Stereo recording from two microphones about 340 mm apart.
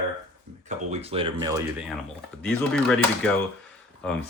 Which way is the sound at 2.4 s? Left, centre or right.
Centre.